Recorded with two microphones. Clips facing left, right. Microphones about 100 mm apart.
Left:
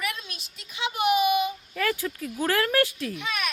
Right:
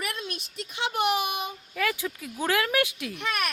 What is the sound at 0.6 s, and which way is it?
Speech, 65° right (ahead or behind).